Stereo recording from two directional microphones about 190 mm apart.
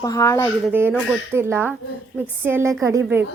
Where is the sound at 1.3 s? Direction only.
10° right (ahead or behind).